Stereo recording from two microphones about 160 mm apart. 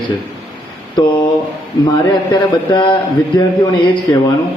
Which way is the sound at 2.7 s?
30° left (ahead or behind).